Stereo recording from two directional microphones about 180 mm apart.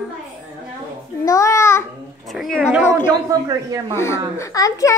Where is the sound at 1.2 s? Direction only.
15° left (ahead or behind).